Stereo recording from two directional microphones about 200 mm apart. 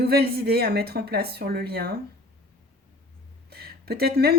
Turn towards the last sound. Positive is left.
turn(degrees=-50)  # may be behind; listen again after turning